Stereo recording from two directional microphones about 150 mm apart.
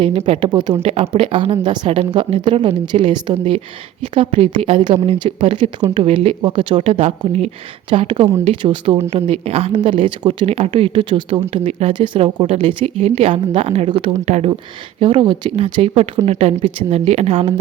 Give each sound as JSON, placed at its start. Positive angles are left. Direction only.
{"t": 0.0, "sound": "speech", "side_deg": -40}
{"t": 15.0, "sound": "speech", "side_deg": -30}